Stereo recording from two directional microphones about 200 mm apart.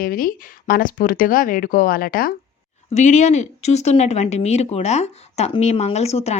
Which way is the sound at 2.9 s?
35° left (ahead or behind).